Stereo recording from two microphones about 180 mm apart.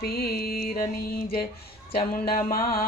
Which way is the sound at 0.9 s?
55° left (ahead or behind).